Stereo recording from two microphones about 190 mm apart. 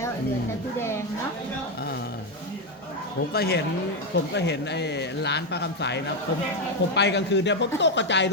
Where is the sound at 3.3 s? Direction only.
55° left (ahead or behind).